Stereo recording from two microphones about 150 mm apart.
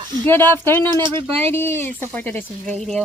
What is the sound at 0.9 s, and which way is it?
Speech, 30° right (ahead or behind).